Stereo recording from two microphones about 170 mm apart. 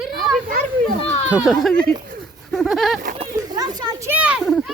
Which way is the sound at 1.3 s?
5° right (ahead or behind).